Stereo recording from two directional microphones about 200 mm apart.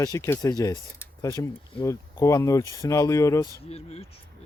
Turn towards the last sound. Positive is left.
turn(degrees=30)  # may be behind; listen again after turning